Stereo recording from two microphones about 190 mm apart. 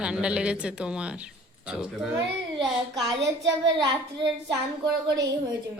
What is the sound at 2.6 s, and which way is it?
Speech, 20° right (ahead or behind).